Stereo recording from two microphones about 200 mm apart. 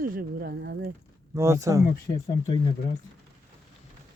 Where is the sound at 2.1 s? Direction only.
25° left (ahead or behind).